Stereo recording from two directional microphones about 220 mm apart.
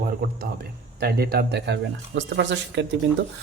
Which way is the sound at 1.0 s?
45° right (ahead or behind).